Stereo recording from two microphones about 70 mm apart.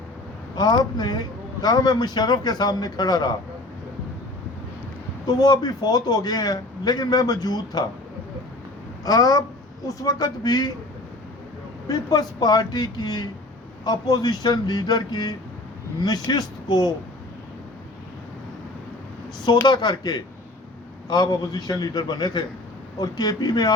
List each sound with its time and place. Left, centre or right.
0.5 s speech: left
1.6 s a man's voice: left
5.2 s a man's voice: left
9.0 s a man's voice: left
11.9 s a man's voice: left
13.8 s a man's voice: left
16.0 s a man's voice: left
19.6 s speech: left
21.1 s a man's voice: left